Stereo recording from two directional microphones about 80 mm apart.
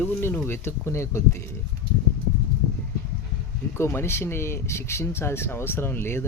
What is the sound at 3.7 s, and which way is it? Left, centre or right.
Speech, left.